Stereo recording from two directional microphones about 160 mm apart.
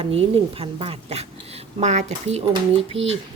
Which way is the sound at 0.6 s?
35° right (ahead or behind).